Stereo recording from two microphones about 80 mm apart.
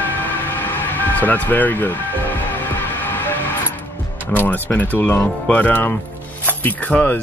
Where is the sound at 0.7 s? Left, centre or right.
Left.